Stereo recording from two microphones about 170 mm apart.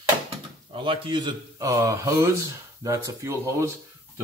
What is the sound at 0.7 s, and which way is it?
Speech, 30° right (ahead or behind).